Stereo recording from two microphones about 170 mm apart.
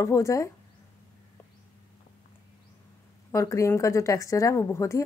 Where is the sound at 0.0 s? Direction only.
15° left (ahead or behind).